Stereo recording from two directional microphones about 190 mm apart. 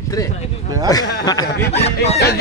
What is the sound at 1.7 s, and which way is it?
Speech, 35° left (ahead or behind).